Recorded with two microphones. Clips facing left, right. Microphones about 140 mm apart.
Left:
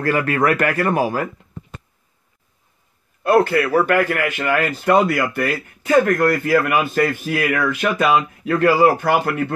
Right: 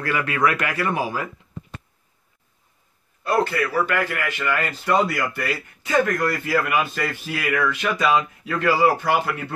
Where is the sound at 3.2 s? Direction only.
55° left (ahead or behind).